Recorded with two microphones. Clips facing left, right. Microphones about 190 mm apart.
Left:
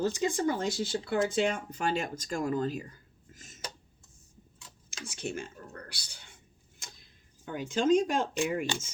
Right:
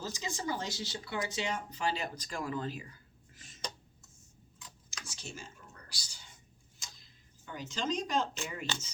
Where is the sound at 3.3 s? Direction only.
45° left (ahead or behind).